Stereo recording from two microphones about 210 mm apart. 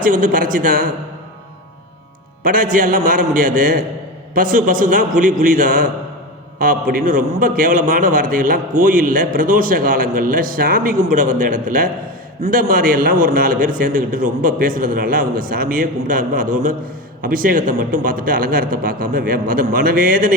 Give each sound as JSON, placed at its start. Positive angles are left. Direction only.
{"t": 0.0, "sound": "a man's voice", "side_deg": -40}
{"t": 2.4, "sound": "a man's voice", "side_deg": -40}